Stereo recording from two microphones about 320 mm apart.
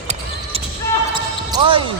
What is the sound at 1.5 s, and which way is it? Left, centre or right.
Speech, centre.